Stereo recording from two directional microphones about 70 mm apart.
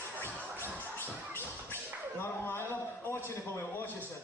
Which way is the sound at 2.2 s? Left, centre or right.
Left.